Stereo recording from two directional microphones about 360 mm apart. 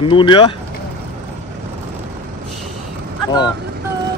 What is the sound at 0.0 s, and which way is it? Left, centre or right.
Speech, centre.